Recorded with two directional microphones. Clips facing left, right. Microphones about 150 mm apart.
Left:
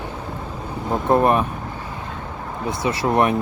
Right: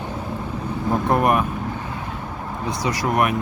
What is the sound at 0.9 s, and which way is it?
Speech, 25° left (ahead or behind).